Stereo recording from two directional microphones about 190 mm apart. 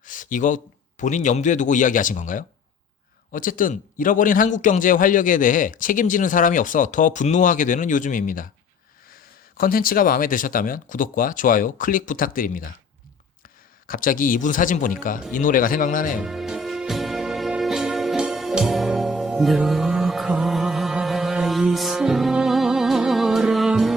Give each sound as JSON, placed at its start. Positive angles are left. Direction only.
{"t": 0.0, "sound": "a man's voice", "side_deg": 45}
{"t": 9.6, "sound": "a man's voice", "side_deg": 50}
{"t": 13.8, "sound": "a man's voice", "side_deg": 45}
{"t": 16.2, "sound": "music", "side_deg": 0}